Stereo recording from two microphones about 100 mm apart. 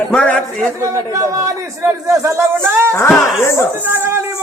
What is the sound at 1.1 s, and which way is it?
A man's voice, 35° right (ahead or behind).